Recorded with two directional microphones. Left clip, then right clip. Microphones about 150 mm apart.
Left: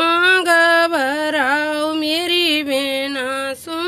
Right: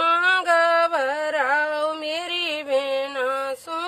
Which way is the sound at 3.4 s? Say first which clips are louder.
Left 4 dB; centre (ahead or behind).